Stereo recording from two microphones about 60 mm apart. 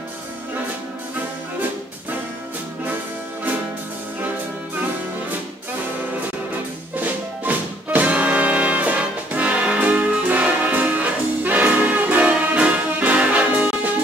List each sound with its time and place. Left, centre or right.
7.0 s music: right